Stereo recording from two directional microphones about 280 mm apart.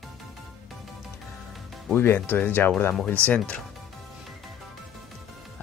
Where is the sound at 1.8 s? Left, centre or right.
Centre.